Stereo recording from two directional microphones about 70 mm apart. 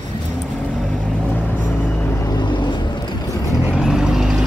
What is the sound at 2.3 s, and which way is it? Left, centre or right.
Vehicle, left.